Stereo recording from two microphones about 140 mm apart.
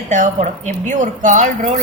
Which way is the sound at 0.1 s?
65° right (ahead or behind).